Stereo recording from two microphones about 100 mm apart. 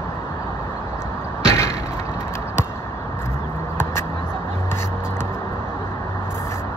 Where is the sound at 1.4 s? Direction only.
25° left (ahead or behind).